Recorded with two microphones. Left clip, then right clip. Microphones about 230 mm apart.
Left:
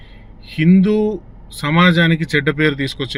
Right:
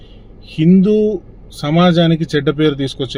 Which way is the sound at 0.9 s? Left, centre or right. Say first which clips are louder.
Right 4 dB; right.